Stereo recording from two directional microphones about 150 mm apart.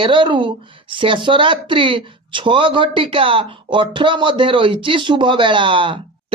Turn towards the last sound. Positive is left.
turn(degrees=-35)  # may be behind; listen again after turning